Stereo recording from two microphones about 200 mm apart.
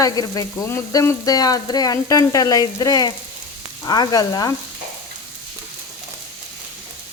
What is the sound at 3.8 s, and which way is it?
Speech, 20° left (ahead or behind).